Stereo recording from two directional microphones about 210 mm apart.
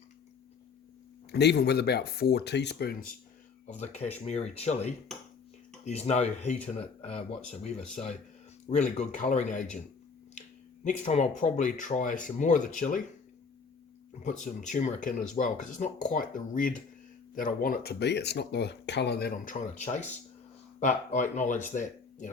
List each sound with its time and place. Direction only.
1.3 s speech: 55° left (ahead or behind)
3.7 s speech: 30° left (ahead or behind)
10.8 s speech: 35° left (ahead or behind)
14.2 s speech: 35° left (ahead or behind)